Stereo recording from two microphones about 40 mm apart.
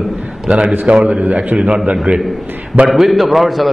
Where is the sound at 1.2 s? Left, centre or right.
Right.